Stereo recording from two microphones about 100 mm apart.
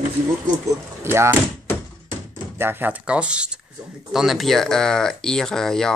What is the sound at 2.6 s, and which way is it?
Speech, 20° right (ahead or behind).